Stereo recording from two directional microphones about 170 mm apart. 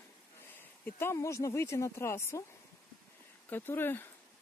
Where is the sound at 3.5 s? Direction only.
10° left (ahead or behind).